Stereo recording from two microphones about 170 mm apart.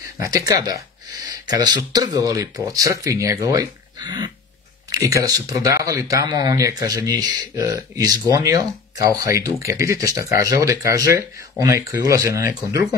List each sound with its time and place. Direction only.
0.0 s speech: 20° right (ahead or behind)